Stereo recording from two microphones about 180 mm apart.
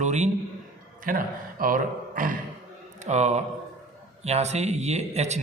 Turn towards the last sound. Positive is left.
turn(degrees=-35)  # may be behind; listen again after turning